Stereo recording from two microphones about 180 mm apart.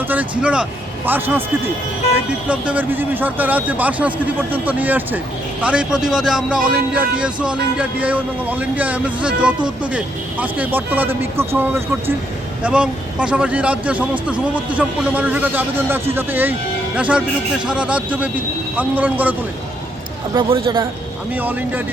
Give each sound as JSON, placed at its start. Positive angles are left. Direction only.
{"t": 0.1, "sound": "speech", "side_deg": -10}
{"t": 20.3, "sound": "speech", "side_deg": -25}
{"t": 21.3, "sound": "speech", "side_deg": -10}